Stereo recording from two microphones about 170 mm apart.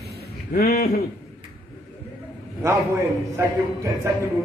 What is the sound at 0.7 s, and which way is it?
Speech, 45° left (ahead or behind).